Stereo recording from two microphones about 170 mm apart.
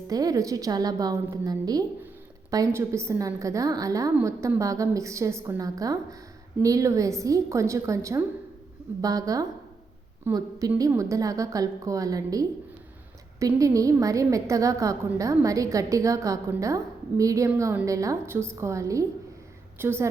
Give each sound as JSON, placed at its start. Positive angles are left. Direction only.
{"t": 0.1, "sound": "a woman's voice", "side_deg": -20}
{"t": 13.6, "sound": "a woman's voice", "side_deg": -20}